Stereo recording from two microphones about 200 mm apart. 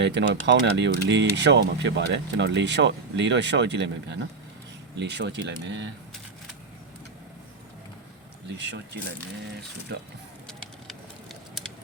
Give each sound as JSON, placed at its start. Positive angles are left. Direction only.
{"t": 0.0, "sound": "speech", "side_deg": -60}
{"t": 8.5, "sound": "speech", "side_deg": -60}